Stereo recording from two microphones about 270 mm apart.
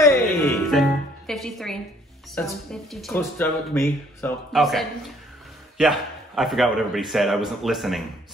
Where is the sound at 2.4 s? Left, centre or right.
Centre.